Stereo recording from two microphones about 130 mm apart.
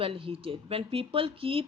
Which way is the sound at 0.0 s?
45° right (ahead or behind).